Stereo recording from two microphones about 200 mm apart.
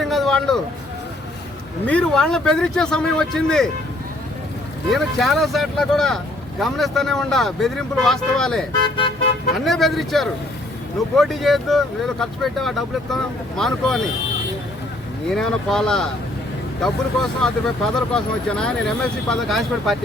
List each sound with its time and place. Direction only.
0.0 s vehicle: centre (ahead or behind)
1.9 s speech: 5° left (ahead or behind)
4.9 s speech: centre (ahead or behind)
15.3 s speech: centre (ahead or behind)